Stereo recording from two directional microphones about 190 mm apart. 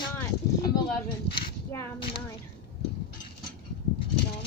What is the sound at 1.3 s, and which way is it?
Speech, 25° left (ahead or behind).